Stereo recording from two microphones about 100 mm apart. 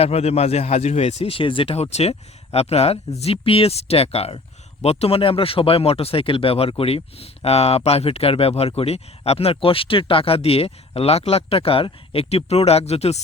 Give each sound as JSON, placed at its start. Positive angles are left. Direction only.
{"t": 0.0, "sound": "speech", "side_deg": 90}